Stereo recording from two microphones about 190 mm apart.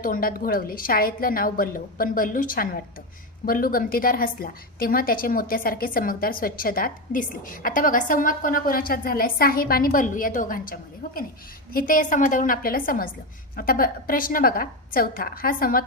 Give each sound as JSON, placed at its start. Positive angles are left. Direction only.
{"t": 0.0, "sound": "a woman's voice", "side_deg": 50}